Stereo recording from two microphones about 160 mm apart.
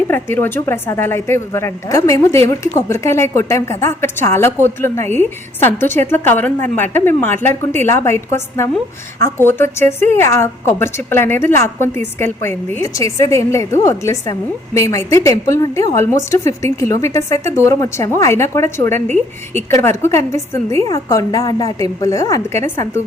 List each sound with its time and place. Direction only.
0.1 s a woman's voice: 15° left (ahead or behind)